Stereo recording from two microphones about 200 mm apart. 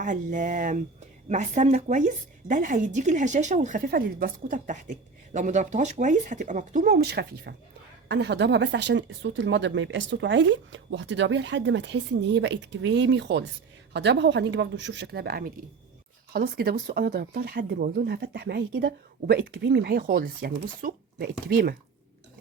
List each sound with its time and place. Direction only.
0.0 s speech: 40° right (ahead or behind)